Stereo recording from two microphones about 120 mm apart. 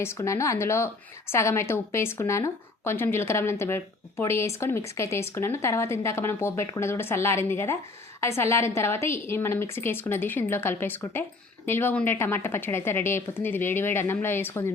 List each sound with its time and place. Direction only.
0.0 s a woman's voice: 25° left (ahead or behind)